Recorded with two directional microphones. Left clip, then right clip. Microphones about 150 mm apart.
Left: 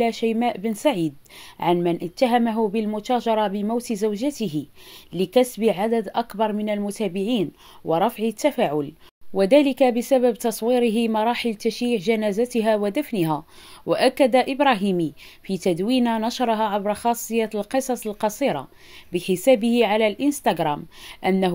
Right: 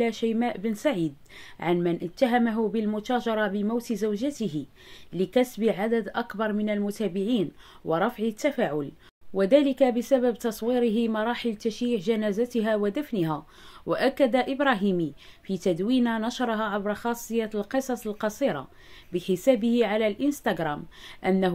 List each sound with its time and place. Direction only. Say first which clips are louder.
0.0 s speech: left 5 dB; 15° left (ahead or behind)